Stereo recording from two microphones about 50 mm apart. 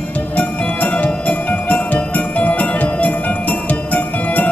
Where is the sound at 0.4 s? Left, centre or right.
Left.